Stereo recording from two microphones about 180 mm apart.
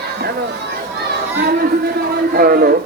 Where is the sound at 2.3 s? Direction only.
55° right (ahead or behind).